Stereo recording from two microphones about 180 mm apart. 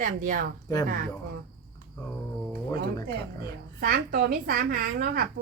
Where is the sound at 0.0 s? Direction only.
50° right (ahead or behind).